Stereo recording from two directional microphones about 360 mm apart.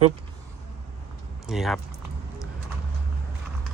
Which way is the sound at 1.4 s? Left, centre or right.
Centre.